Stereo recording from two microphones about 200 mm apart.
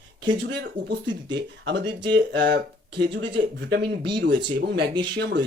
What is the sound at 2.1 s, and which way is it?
Speech, 60° right (ahead or behind).